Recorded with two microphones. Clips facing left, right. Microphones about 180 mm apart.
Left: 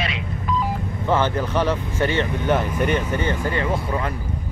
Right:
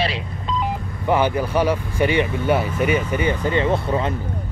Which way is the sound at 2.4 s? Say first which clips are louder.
Right 1 dB; 10° right (ahead or behind).